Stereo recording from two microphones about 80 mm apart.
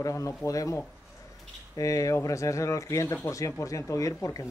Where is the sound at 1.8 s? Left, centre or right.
Left.